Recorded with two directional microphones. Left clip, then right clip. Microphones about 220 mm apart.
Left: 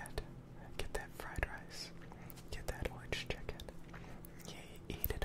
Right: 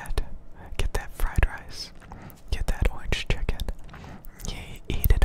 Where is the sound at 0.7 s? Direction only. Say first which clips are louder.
Right 11 dB; 55° right (ahead or behind).